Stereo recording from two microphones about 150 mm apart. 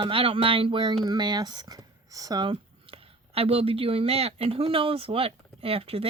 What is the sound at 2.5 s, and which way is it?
Speech, 40° right (ahead or behind).